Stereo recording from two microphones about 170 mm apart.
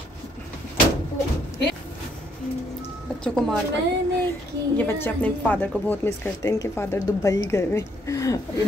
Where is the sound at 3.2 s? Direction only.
5° left (ahead or behind).